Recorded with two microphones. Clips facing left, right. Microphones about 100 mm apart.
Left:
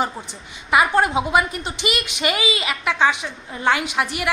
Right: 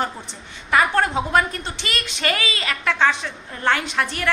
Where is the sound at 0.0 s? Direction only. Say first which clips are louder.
Left 2 dB; 10° left (ahead or behind).